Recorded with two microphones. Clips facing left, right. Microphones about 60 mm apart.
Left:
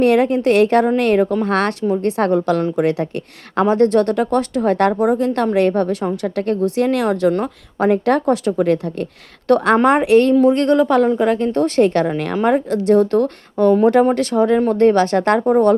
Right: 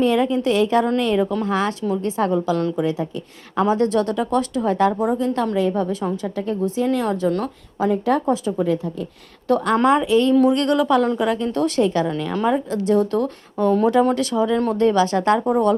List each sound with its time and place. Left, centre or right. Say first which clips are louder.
0.0 s a woman's voice: left 4 dB; left
3.7 s speech: left 6 dB; left
5.5 s a woman's voice: left 5 dB; left
6.7 s a woman's voice: left 2 dB; left
7.1 s a woman's voice: left 5 dB; left
7.8 s a woman's voice: left 4 dB; left
9.8 s a woman's voice: left 4 dB; left
10.5 s a woman's voice: left 3 dB; left